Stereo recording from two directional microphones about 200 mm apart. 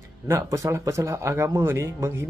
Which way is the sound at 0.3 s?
15° right (ahead or behind).